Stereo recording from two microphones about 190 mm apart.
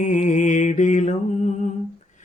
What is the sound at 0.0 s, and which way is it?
Mantra, 40° left (ahead or behind).